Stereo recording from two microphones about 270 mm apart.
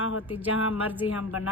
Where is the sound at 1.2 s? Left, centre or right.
Left.